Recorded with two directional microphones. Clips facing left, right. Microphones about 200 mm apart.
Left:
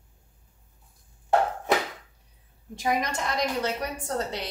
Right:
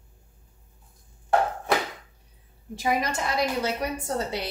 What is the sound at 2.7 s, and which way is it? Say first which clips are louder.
A woman's voice: right 1 dB; 5° right (ahead or behind).